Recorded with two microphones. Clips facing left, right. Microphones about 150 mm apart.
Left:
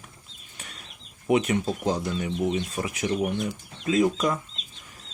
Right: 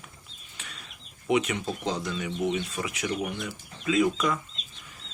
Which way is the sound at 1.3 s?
40° left (ahead or behind).